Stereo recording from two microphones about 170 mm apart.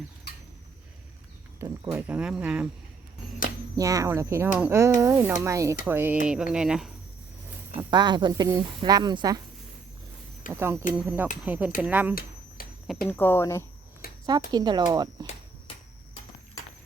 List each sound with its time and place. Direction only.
1.5 s speech: 15° right (ahead or behind)
3.8 s speech: 20° right (ahead or behind); by 6.9 s 5° right (ahead or behind)
7.8 s speech: 25° right (ahead or behind)
10.5 s speech: 15° right (ahead or behind)
12.6 s a sound: 60° left (ahead or behind)
13.1 s speech: 10° left (ahead or behind)
14.0 s a sound: 60° left (ahead or behind)
14.5 s speech: 25° right (ahead or behind)